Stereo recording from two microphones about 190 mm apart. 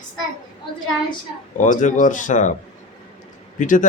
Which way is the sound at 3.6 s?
45° left (ahead or behind).